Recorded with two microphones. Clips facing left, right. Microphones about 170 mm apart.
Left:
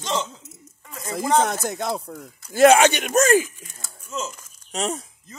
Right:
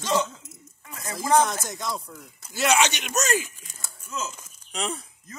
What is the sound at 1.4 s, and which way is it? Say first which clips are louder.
A man's voice: left 6 dB; 60° left (ahead or behind).